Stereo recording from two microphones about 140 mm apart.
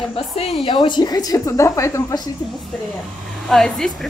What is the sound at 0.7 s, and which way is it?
A woman's voice, 35° left (ahead or behind).